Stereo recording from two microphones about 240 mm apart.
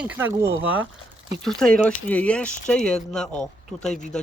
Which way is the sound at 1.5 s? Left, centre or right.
Centre.